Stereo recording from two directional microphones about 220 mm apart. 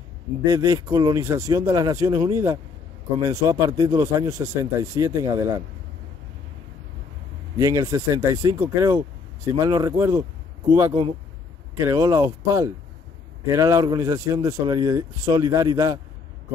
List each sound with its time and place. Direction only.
0.4 s speech: 15° right (ahead or behind)
7.5 s speech: 15° right (ahead or behind)
11.7 s speech: 15° right (ahead or behind)